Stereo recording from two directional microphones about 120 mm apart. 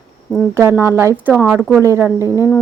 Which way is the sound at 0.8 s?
20° right (ahead or behind).